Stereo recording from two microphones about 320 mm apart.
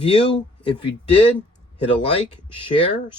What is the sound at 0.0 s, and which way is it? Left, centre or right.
Speech, centre.